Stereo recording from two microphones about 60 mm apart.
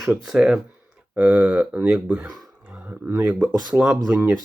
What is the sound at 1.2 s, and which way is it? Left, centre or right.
Speech, right.